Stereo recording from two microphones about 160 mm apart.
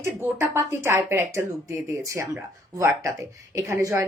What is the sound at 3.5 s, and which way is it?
Speech, 20° right (ahead or behind).